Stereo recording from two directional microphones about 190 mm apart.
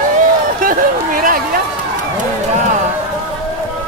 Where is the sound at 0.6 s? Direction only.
45° right (ahead or behind).